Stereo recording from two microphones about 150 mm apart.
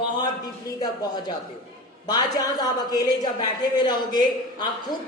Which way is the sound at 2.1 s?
30° left (ahead or behind).